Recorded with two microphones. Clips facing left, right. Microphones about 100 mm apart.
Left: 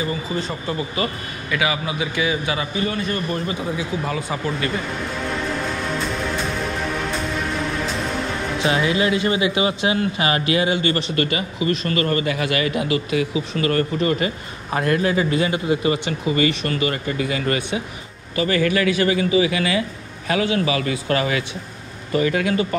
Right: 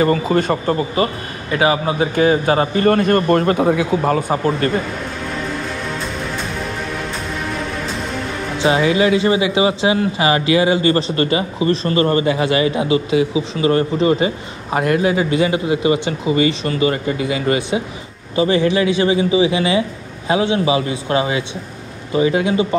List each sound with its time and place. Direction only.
0.0 s speech: 60° right (ahead or behind)
0.7 s speech: 35° right (ahead or behind)
8.6 s speech: 25° right (ahead or behind)